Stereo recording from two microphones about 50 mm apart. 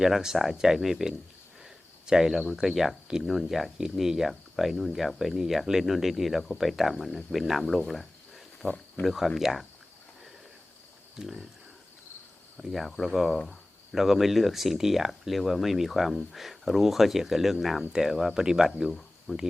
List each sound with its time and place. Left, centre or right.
0.0 s speech: centre
1.6 s cricket: centre
2.6 s speech: centre
8.6 s speech: left
9.0 s speech: centre
11.2 s speech: centre
12.5 s speech: centre